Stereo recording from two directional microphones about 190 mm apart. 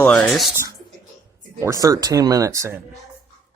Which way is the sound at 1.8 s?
20° right (ahead or behind).